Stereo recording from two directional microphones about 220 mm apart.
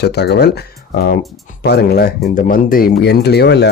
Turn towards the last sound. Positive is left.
turn(degrees=50)  # may be behind; listen again after turning